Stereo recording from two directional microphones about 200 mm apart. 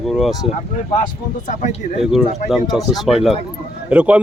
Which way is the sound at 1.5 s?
40° left (ahead or behind).